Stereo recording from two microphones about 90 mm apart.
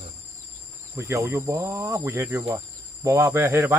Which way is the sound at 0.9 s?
35° right (ahead or behind).